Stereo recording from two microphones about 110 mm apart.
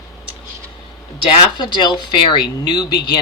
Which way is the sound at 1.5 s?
45° left (ahead or behind).